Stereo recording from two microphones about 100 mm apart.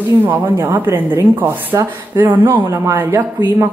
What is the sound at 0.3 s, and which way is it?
Speech, 30° right (ahead or behind).